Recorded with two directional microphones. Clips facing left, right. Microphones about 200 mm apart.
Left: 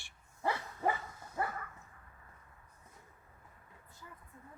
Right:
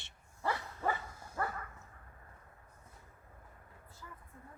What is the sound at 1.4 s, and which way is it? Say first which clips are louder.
Dog: left 1 dB; 20° left (ahead or behind).